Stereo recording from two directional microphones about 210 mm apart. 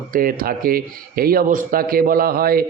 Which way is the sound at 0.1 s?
45° right (ahead or behind).